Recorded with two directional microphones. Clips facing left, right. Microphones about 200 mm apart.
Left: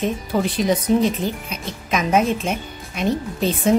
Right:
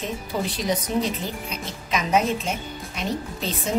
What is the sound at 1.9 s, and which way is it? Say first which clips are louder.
Speech: left 4 dB; 50° left (ahead or behind).